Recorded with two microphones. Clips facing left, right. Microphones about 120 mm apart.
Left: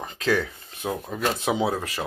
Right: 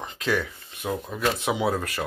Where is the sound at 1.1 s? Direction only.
35° left (ahead or behind).